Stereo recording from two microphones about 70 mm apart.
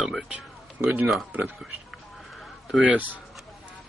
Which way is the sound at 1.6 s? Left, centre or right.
Centre.